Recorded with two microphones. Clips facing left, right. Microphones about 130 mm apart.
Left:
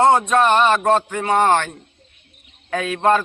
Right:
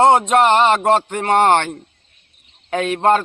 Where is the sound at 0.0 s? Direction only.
25° right (ahead or behind).